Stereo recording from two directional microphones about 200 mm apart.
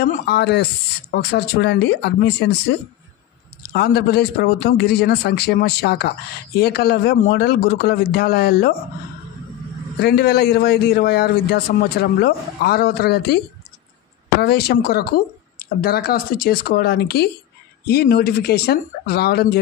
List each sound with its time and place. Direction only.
0.0 s speech: 50° left (ahead or behind)
3.7 s speech: 50° left (ahead or behind)
9.9 s speech: 55° left (ahead or behind)
14.4 s speech: 55° left (ahead or behind)